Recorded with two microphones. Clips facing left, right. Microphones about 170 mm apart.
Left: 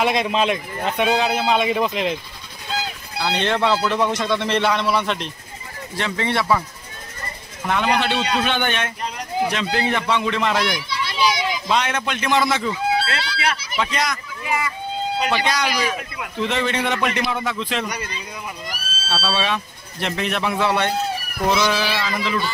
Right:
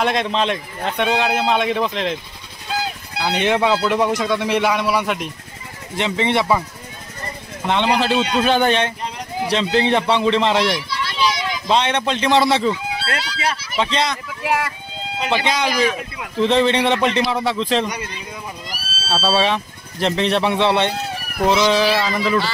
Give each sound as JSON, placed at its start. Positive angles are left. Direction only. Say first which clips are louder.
{"t": 0.0, "sound": "speech", "louder": "even", "side_deg": 5}
{"t": 3.2, "sound": "a man's voice", "louder": "right 3 dB", "side_deg": -15}
{"t": 5.9, "sound": "speech", "louder": "right 4 dB", "side_deg": -20}
{"t": 7.6, "sound": "speech", "louder": "right 2 dB", "side_deg": -25}
{"t": 11.1, "sound": "a sound", "louder": "left 1 dB", "side_deg": 5}
{"t": 11.7, "sound": "speech", "louder": "right 5 dB", "side_deg": -30}
{"t": 14.4, "sound": "speech", "louder": "right 4 dB", "side_deg": -75}
{"t": 15.2, "sound": "speech", "louder": "right 4 dB", "side_deg": -20}
{"t": 19.0, "sound": "speech", "louder": "right 5 dB", "side_deg": -40}
{"t": 21.9, "sound": "speech", "louder": "right 5 dB", "side_deg": -35}